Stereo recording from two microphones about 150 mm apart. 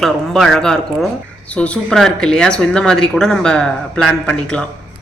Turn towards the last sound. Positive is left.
turn(degrees=5)  # may be behind; listen again after turning